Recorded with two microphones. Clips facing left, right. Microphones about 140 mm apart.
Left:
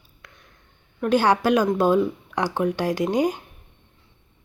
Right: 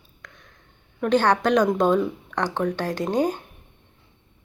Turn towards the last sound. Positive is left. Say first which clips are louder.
# left 1 dB
turn(degrees=10)  # may be behind; listen again after turning